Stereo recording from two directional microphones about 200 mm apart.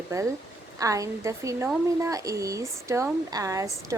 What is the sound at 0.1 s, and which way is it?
Speech, 15° right (ahead or behind).